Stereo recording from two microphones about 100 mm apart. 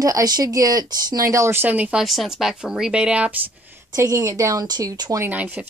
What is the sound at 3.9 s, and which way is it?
Speech, 35° right (ahead or behind).